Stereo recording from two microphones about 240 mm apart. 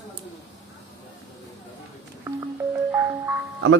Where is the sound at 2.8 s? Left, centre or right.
Centre.